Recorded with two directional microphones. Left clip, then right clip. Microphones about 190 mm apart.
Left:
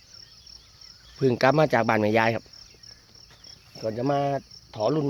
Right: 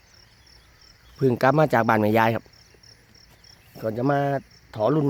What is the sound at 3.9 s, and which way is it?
Speech, 25° right (ahead or behind).